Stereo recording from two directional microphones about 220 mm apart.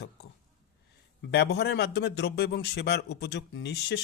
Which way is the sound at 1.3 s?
50° left (ahead or behind).